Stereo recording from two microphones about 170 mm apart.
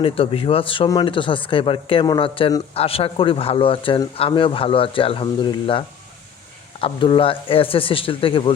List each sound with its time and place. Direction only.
0.0 s speech: 30° left (ahead or behind)